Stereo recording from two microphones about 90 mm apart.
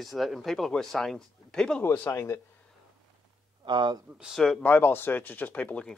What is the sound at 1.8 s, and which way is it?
Speech, 25° left (ahead or behind).